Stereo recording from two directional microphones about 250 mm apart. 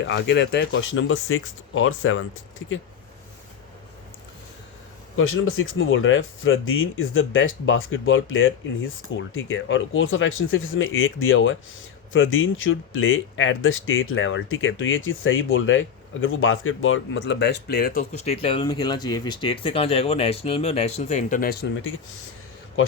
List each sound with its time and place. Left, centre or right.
0.0 s speech: left
5.1 s speech: left